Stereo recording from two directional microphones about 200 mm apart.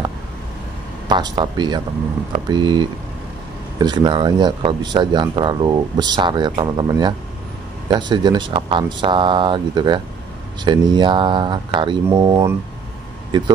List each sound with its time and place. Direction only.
1.0 s speech: 20° right (ahead or behind)